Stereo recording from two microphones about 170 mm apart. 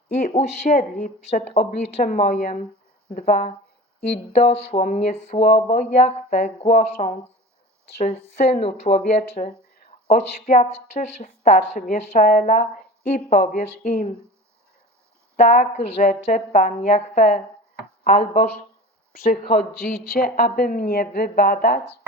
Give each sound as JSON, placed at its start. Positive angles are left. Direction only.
{"t": 0.2, "sound": "a woman's voice", "side_deg": 40}
{"t": 2.1, "sound": "a woman's voice", "side_deg": 55}
{"t": 4.4, "sound": "a woman's voice", "side_deg": 40}
{"t": 15.4, "sound": "speech", "side_deg": 45}
{"t": 18.0, "sound": "speech", "side_deg": 55}